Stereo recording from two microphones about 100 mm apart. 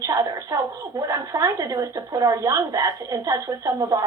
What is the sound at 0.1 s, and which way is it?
A woman's voice, 35° right (ahead or behind).